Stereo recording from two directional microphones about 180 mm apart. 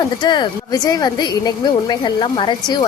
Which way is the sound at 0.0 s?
25° left (ahead or behind).